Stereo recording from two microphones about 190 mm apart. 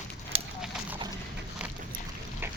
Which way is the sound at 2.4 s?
10° right (ahead or behind).